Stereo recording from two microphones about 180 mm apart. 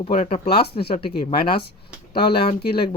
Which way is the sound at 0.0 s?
30° left (ahead or behind).